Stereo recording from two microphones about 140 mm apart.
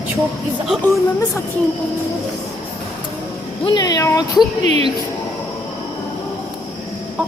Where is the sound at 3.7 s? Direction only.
30° left (ahead or behind).